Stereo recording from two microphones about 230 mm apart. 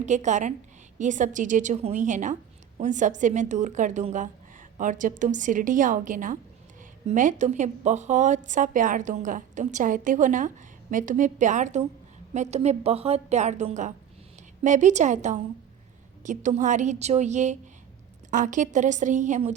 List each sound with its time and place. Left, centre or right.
0.0 s a woman's voice: right